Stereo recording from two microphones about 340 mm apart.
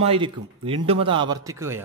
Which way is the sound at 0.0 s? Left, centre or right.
Centre.